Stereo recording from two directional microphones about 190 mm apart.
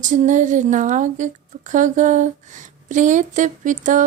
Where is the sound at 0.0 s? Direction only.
40° right (ahead or behind).